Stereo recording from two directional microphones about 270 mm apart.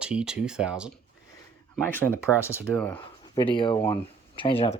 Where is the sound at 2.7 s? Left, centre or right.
Centre.